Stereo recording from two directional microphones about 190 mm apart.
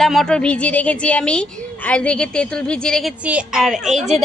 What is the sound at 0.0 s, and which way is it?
A woman's voice, centre (ahead or behind).